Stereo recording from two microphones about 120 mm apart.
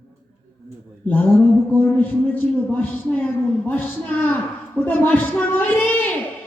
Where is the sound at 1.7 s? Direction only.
15° left (ahead or behind).